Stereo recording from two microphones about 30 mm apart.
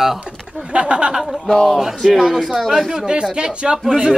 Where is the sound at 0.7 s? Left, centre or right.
Right.